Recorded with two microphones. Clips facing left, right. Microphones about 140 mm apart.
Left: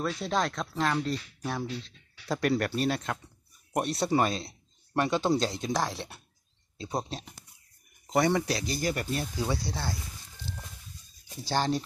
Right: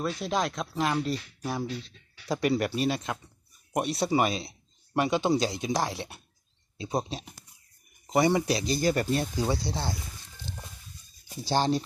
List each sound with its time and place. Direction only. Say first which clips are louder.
0.0 s speech: even; 5° right (ahead or behind); by 9.9 s 25° right (ahead or behind)
11.5 s speech: right 2 dB; 25° right (ahead or behind)